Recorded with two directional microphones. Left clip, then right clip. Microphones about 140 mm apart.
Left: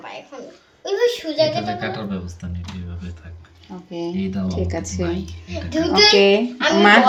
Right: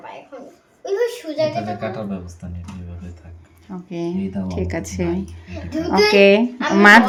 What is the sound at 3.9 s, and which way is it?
A woman's voice, 20° right (ahead or behind).